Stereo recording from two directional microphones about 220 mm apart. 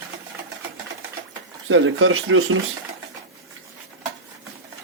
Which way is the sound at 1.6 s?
65° right (ahead or behind).